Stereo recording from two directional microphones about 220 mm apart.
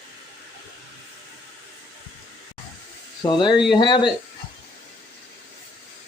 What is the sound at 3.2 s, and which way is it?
Speech, 20° left (ahead or behind).